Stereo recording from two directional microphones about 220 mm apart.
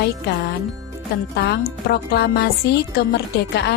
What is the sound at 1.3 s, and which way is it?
Speech, 50° left (ahead or behind).